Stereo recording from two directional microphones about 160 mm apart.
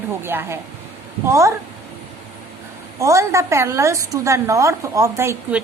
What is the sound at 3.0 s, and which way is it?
A woman's voice, 20° right (ahead or behind).